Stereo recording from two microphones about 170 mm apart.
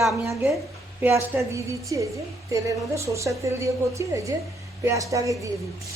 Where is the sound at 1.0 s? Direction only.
15° right (ahead or behind).